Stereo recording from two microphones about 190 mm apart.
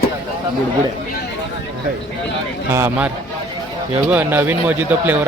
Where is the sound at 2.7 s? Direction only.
10° right (ahead or behind).